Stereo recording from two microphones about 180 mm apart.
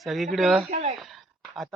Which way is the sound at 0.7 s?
40° right (ahead or behind).